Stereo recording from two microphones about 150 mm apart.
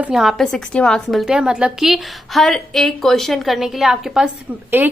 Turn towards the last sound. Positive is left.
turn(degrees=-10)  # may be behind; listen again after turning